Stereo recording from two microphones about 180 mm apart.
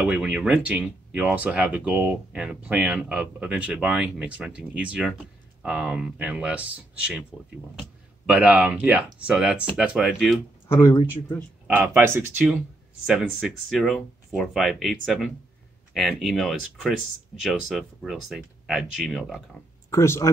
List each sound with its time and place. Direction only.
0.0 s speech: 5° right (ahead or behind)
8.3 s speech: 5° right (ahead or behind)
10.7 s speech: 20° left (ahead or behind)
11.6 s speech: 10° right (ahead or behind)
13.0 s speech: centre (ahead or behind)
19.9 s speech: 15° left (ahead or behind)